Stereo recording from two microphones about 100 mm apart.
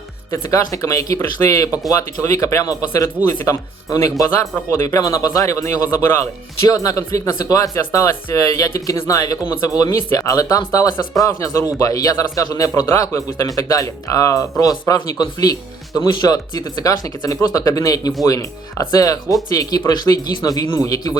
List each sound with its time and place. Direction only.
0.3 s a man's voice: 35° left (ahead or behind)
6.7 s a man's voice: 35° left (ahead or behind)
9.5 s speech: 25° left (ahead or behind)
9.7 s a man's voice: 35° left (ahead or behind)